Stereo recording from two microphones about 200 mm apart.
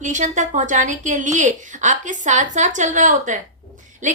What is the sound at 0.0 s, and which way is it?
A woman's voice, 40° right (ahead or behind).